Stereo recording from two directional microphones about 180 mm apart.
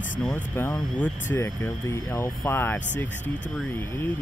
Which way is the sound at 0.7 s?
10° left (ahead or behind).